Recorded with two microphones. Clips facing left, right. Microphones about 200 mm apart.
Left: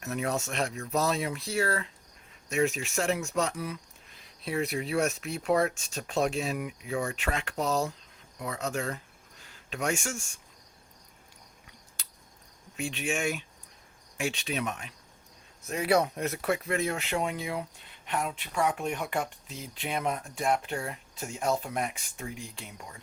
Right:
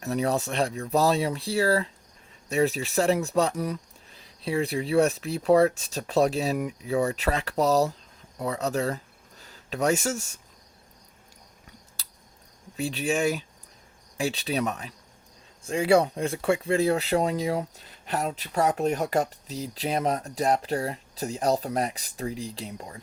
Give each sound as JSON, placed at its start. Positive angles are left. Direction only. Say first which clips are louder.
{"t": 0.0, "sound": "speech", "louder": "right 5 dB", "side_deg": -35}
{"t": 12.7, "sound": "speech", "louder": "right 5 dB", "side_deg": -35}